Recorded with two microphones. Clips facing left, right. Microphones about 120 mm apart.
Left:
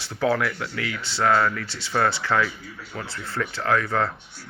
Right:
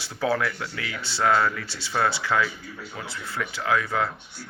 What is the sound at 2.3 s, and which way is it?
Speech, 5° right (ahead or behind).